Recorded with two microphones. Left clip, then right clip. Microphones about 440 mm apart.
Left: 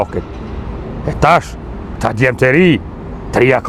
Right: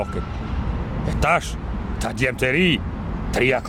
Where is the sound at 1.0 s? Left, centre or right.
Left.